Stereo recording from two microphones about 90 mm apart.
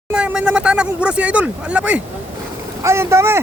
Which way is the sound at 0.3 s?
10° right (ahead or behind).